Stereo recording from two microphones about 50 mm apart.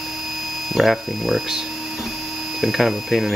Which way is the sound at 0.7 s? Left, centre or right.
Centre.